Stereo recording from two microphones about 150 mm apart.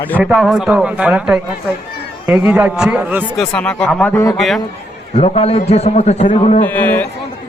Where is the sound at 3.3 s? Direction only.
5° left (ahead or behind).